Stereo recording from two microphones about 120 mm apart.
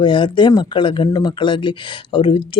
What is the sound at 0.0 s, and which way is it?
Speech, 40° left (ahead or behind).